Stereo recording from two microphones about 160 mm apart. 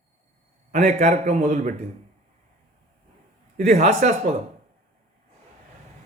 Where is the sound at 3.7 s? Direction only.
50° right (ahead or behind).